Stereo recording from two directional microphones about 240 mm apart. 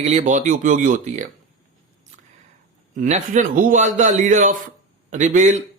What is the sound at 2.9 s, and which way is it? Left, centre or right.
A man's voice, right.